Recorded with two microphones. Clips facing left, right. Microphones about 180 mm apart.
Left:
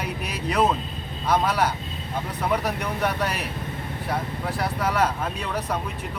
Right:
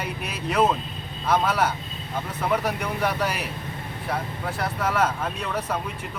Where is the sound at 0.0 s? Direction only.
Centre (ahead or behind).